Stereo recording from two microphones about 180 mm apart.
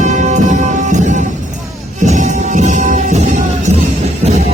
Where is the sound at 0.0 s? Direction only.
40° right (ahead or behind).